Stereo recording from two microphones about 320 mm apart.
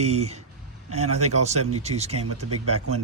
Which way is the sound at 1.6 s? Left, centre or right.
Right.